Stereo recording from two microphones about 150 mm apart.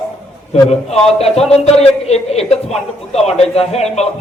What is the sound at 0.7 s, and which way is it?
A man's voice, 45° left (ahead or behind).